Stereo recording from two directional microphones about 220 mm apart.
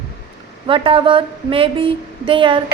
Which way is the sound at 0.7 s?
25° right (ahead or behind).